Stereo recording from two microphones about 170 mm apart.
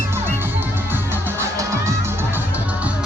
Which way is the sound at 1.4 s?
15° right (ahead or behind).